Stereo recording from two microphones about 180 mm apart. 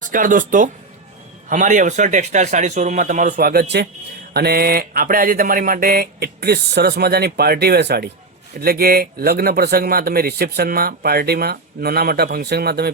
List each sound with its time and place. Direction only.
0.0 s a man's voice: 45° right (ahead or behind)